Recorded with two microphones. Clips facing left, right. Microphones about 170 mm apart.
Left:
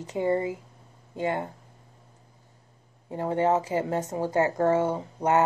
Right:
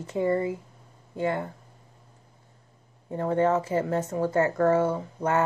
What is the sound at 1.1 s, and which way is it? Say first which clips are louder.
Speech: right 1 dB; 20° left (ahead or behind).